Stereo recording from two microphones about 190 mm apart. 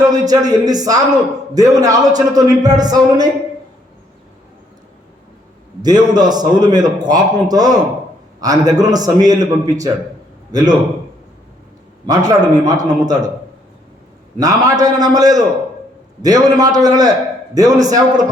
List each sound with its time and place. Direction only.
0.1 s a man's voice: 20° right (ahead or behind)
5.8 s a man's voice: 20° right (ahead or behind)
12.0 s a man's voice: 20° right (ahead or behind)
14.3 s a man's voice: 20° right (ahead or behind)